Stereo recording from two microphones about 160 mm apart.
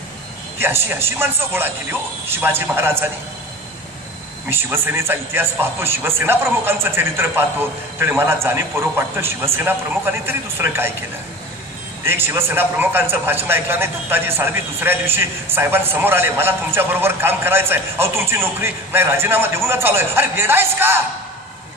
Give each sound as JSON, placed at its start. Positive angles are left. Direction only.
{"t": 0.6, "sound": "a man's voice", "side_deg": -15}
{"t": 4.5, "sound": "a man's voice", "side_deg": -15}
{"t": 12.0, "sound": "a man's voice", "side_deg": -15}